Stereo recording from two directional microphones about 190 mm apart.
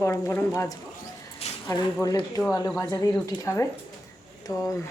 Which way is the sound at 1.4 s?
35° left (ahead or behind).